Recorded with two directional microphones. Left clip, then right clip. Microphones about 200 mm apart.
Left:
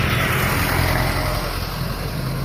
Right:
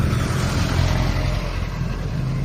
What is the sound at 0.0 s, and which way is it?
Vehicle, 50° right (ahead or behind).